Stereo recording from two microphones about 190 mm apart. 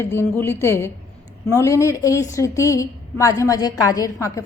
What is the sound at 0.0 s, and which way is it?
A woman's voice, 10° left (ahead or behind).